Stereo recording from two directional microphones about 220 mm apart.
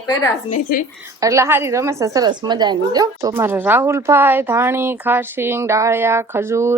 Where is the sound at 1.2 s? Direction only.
15° right (ahead or behind).